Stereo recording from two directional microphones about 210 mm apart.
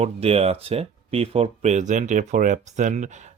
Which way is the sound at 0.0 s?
30° right (ahead or behind).